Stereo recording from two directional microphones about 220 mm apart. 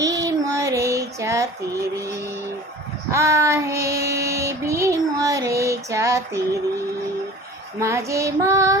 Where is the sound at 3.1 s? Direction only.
15° right (ahead or behind).